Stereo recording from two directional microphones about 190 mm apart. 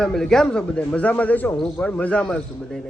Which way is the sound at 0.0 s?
5° left (ahead or behind).